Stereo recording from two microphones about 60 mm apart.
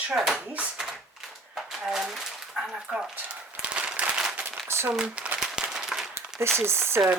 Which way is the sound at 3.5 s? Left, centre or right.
Centre.